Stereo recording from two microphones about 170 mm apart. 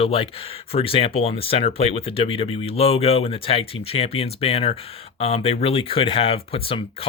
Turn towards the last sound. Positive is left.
turn(degrees=35)  # may be behind; listen again after turning